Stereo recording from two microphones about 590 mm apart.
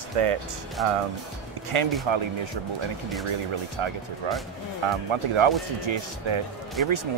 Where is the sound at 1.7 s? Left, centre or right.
Right.